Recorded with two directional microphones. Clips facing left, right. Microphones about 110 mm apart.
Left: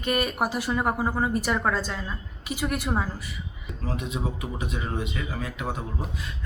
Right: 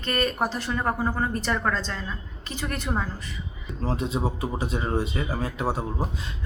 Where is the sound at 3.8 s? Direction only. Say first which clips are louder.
Right 4 dB; 30° right (ahead or behind).